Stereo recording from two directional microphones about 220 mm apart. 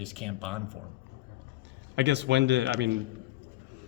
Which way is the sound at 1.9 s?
50° right (ahead or behind).